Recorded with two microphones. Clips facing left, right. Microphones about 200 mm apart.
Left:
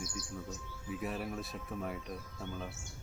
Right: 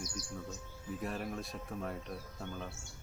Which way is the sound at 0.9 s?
5° left (ahead or behind).